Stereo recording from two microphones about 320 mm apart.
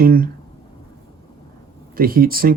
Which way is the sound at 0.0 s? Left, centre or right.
Right.